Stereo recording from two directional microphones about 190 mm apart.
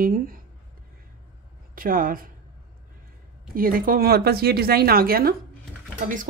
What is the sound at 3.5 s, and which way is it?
Speech, 50° right (ahead or behind).